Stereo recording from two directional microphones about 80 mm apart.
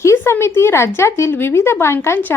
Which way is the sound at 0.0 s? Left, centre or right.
Left.